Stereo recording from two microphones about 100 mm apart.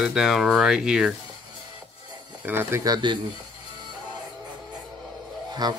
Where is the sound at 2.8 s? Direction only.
45° right (ahead or behind).